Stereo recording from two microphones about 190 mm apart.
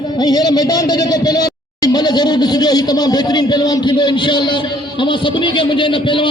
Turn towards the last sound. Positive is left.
turn(degrees=25)  # may be behind; listen again after turning